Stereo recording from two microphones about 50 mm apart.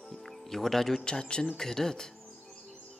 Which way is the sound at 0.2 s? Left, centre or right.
Centre.